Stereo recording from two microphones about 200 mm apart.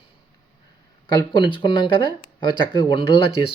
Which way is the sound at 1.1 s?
20° left (ahead or behind).